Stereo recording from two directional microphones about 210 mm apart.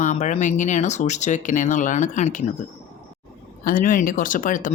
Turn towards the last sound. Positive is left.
turn(degrees=40)  # may be behind; listen again after turning